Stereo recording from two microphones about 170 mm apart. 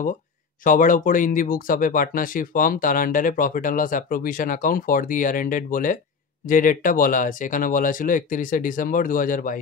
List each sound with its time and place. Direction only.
0.7 s speech: 50° left (ahead or behind)